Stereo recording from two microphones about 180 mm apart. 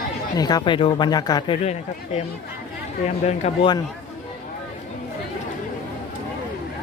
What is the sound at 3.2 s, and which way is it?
Speech, 35° left (ahead or behind).